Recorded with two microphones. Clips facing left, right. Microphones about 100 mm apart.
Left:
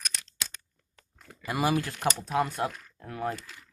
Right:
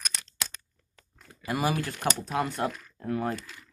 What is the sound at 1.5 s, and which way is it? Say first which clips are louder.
Speech: left 1 dB; 20° left (ahead or behind).